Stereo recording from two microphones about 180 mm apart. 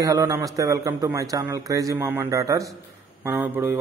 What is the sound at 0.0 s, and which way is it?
A man's voice, 20° right (ahead or behind).